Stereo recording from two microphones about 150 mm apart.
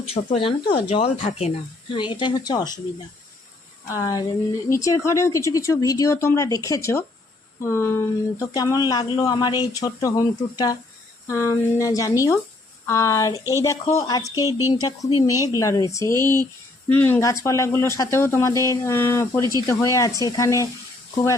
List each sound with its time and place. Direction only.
0.0 s speech: 40° left (ahead or behind)
2.0 s speech: 30° left (ahead or behind)
3.8 s speech: 20° left (ahead or behind)